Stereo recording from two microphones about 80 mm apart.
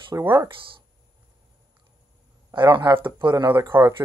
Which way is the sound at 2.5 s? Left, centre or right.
Right.